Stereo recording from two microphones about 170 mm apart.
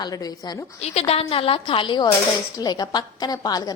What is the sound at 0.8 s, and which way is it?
A woman's voice, 40° left (ahead or behind).